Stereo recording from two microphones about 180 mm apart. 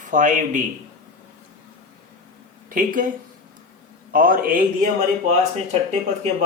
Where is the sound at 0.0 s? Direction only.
45° right (ahead or behind).